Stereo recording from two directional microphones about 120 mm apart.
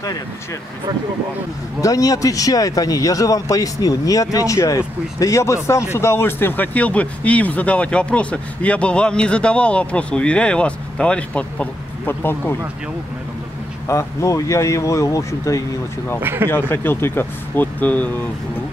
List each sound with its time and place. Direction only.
1.8 s speech: 30° left (ahead or behind)
13.8 s speech: 25° left (ahead or behind)
16.2 s speech: 15° right (ahead or behind)
16.4 s speech: 20° left (ahead or behind)